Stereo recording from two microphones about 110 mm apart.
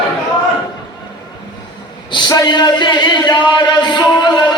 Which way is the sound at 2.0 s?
45° left (ahead or behind).